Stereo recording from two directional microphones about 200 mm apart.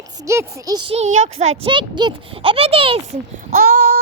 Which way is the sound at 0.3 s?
15° right (ahead or behind).